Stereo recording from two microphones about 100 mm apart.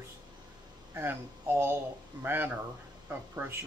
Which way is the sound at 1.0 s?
25° right (ahead or behind).